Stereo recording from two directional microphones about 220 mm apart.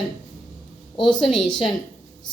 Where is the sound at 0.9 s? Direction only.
20° left (ahead or behind).